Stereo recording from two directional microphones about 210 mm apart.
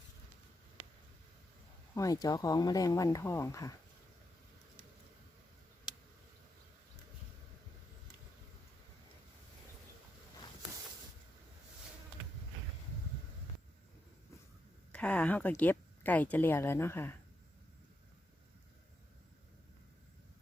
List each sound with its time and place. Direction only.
2.0 s speech: 15° left (ahead or behind)
14.9 s speech: 5° left (ahead or behind)